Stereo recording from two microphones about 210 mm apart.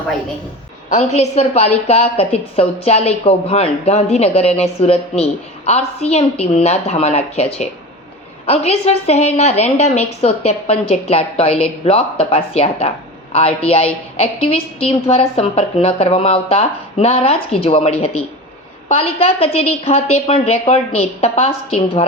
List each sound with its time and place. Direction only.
0.9 s a woman's voice: 30° left (ahead or behind)